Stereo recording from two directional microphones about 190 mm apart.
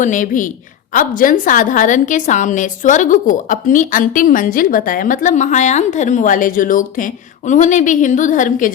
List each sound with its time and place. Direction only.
0.0 s a woman's voice: 40° left (ahead or behind)